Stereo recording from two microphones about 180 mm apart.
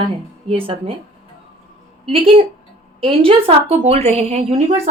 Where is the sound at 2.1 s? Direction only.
30° right (ahead or behind).